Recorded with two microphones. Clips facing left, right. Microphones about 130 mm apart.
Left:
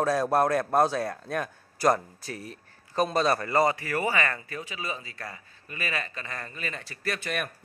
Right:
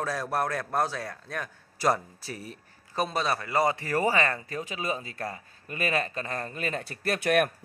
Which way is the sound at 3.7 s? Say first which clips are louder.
Right 2 dB; 35° right (ahead or behind).